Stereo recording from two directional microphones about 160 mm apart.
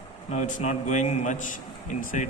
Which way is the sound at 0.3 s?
50° left (ahead or behind).